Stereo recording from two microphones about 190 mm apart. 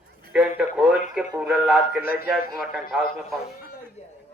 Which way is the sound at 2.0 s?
55° left (ahead or behind).